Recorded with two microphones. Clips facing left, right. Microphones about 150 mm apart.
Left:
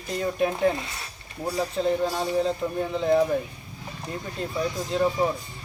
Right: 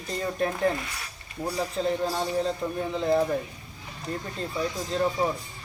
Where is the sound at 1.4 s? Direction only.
Centre (ahead or behind).